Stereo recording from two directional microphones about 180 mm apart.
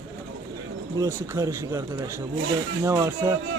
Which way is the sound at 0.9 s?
15° right (ahead or behind).